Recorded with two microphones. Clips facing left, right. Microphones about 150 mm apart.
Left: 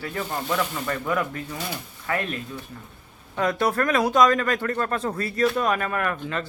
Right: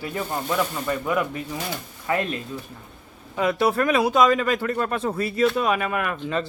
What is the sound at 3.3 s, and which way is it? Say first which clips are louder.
Speech: right 2 dB; 5° right (ahead or behind).